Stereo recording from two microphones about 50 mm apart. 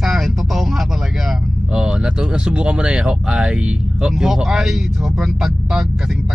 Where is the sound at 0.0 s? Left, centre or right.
Centre.